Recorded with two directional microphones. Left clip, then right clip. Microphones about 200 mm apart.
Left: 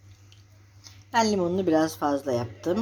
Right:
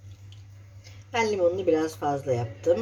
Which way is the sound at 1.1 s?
50° left (ahead or behind).